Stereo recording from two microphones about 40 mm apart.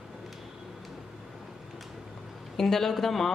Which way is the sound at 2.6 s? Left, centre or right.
Centre.